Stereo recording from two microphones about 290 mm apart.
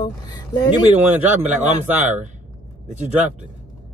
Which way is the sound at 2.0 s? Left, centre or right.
Right.